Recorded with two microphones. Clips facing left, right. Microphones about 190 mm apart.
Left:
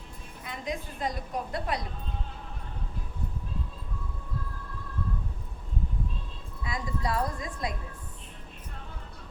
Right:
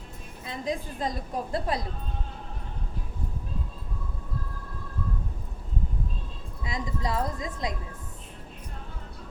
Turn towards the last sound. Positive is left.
turn(degrees=-20)  # may be behind; listen again after turning